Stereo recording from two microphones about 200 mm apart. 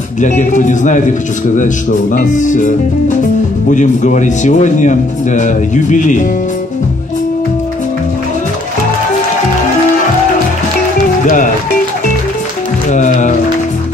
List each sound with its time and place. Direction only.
0.4 s speech: 40° left (ahead or behind)
11.2 s speech: 40° left (ahead or behind)
12.9 s speech: 35° left (ahead or behind)